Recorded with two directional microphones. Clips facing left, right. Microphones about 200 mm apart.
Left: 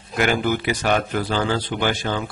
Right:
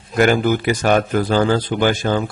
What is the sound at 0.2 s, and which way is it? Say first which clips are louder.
A man's voice: right 5 dB; 45° right (ahead or behind).